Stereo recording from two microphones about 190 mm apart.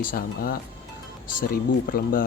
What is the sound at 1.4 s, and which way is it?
Speech, 50° left (ahead or behind).